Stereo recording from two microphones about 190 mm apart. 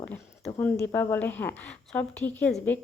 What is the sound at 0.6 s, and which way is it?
A woman's voice, 10° left (ahead or behind).